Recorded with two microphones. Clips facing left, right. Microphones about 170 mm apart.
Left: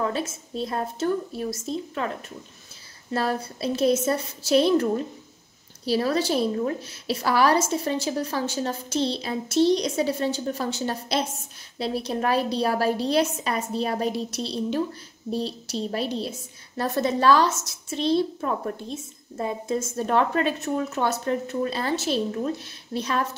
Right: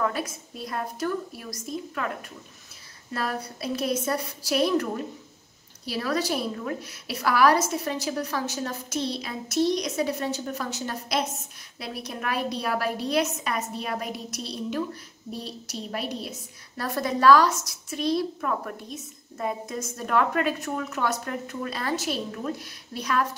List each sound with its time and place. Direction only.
0.0 s a woman's voice: 25° left (ahead or behind)